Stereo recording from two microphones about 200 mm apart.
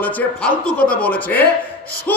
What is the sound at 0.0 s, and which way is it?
A man's voice, 10° left (ahead or behind).